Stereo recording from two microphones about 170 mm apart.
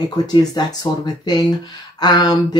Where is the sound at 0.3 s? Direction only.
25° left (ahead or behind).